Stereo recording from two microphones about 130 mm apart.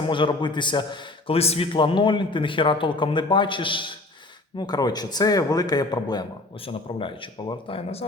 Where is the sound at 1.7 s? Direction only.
40° left (ahead or behind).